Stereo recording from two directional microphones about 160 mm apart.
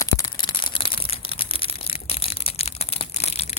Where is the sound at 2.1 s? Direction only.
35° left (ahead or behind).